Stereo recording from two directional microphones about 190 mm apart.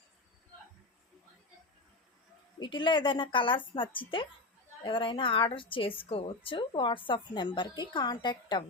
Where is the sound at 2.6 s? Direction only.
25° left (ahead or behind).